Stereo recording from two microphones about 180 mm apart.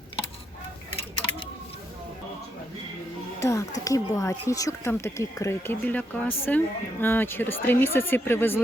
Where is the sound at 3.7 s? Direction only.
20° left (ahead or behind).